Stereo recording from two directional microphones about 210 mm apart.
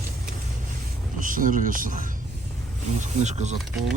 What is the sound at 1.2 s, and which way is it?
Speech, 40° right (ahead or behind).